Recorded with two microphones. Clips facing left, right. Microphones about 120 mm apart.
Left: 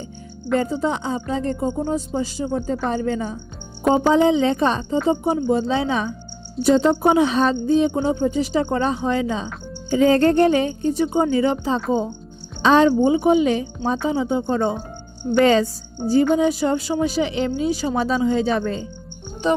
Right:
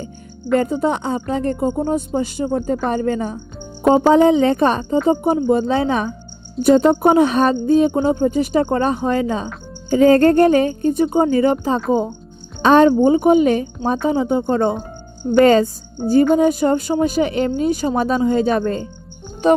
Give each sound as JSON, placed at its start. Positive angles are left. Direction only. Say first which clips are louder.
{"t": 0.6, "sound": "speech", "louder": "right 3 dB", "side_deg": -55}